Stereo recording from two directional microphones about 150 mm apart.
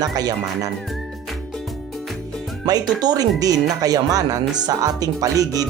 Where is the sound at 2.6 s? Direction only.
25° right (ahead or behind).